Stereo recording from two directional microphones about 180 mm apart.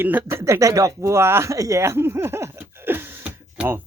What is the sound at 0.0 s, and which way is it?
Speech, 10° right (ahead or behind).